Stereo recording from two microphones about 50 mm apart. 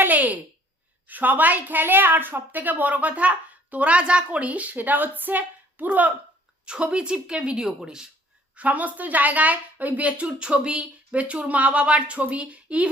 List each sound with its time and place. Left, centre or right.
0.0 s a sound: right
1.0 s a woman's voice: right
6.7 s speech: right
8.5 s a woman's voice: right